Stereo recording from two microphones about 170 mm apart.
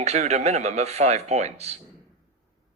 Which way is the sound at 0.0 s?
40° right (ahead or behind).